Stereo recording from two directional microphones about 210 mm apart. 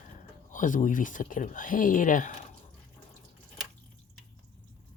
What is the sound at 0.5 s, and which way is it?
Speech, 40° left (ahead or behind).